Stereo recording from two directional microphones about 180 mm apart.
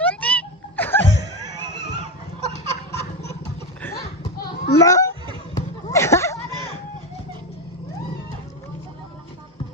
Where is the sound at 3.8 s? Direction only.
15° left (ahead or behind).